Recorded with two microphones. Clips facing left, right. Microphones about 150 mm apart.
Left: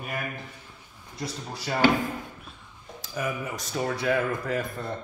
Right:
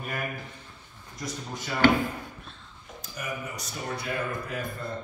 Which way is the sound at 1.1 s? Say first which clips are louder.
Left 1 dB; 30° left (ahead or behind).